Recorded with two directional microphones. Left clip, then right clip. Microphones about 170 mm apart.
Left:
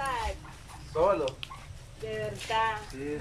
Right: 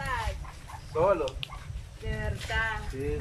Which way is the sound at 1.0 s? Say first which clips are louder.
Even; centre (ahead or behind).